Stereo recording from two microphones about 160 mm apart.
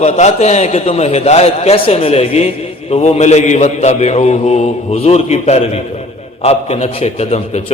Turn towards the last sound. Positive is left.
turn(degrees=45)  # may be behind; listen again after turning